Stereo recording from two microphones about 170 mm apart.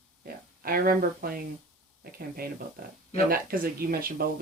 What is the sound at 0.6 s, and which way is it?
Speech, 60° right (ahead or behind).